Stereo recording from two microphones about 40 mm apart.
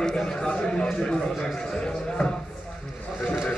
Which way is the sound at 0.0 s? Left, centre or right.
Centre.